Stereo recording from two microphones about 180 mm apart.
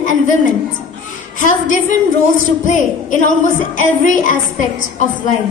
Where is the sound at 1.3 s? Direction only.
45° left (ahead or behind).